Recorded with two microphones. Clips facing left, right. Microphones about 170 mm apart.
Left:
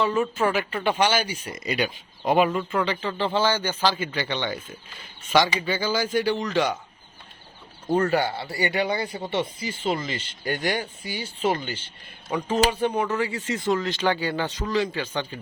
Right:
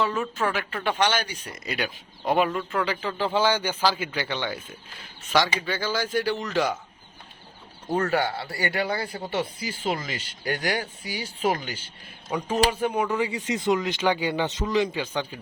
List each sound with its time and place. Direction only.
0.0 s speech: centre (ahead or behind)
7.9 s speech: centre (ahead or behind)